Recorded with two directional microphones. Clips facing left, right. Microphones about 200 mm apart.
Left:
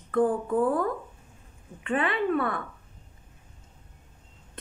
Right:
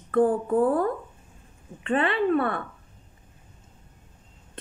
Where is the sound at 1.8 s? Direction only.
35° right (ahead or behind).